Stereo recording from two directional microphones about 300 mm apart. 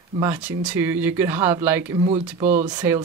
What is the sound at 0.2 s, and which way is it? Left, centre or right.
Speech, centre.